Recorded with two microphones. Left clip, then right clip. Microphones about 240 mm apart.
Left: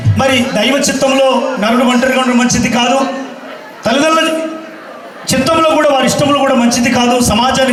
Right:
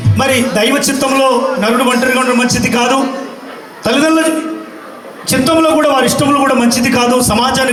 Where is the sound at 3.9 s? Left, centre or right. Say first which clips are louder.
Left 1 dB; right.